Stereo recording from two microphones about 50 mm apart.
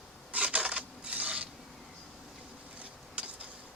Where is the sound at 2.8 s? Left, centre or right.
Right.